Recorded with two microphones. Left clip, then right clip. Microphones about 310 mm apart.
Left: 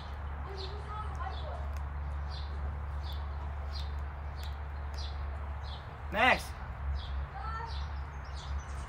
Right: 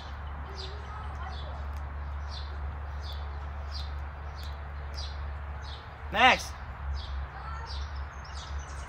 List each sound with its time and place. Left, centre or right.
6.1 s speech: right